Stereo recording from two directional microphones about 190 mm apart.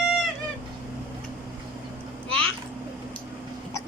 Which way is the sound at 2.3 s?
85° left.